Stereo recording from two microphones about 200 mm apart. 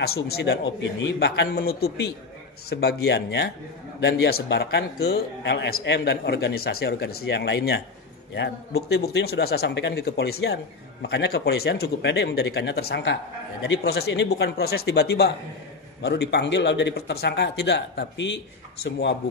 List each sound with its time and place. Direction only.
0.0 s a man's voice: 50° left (ahead or behind)